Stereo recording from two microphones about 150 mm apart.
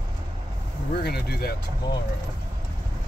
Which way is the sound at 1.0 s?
90° left.